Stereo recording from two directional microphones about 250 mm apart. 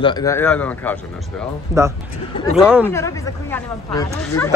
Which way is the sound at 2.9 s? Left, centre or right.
Centre.